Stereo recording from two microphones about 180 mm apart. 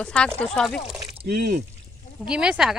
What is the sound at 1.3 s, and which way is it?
Speech, 45° right (ahead or behind).